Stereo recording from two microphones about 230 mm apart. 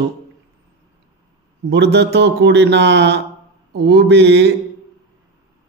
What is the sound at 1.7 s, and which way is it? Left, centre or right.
Mantra, right.